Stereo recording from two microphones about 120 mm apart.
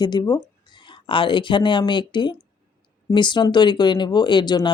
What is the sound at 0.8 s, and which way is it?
Speech, 45° left (ahead or behind).